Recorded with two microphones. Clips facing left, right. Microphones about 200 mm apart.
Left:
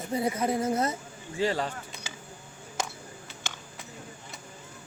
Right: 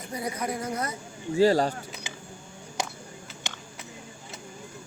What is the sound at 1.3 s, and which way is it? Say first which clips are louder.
Speech: right 7 dB; 40° right (ahead or behind).